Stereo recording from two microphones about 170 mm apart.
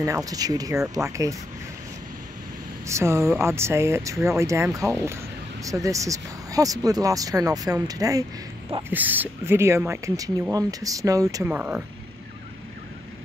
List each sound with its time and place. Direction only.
0.0 s speech: 20° right (ahead or behind)
2.9 s speech: 15° right (ahead or behind)
8.9 s speech: 10° right (ahead or behind)